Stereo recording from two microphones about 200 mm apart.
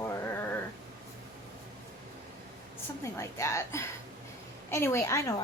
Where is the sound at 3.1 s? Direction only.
15° left (ahead or behind).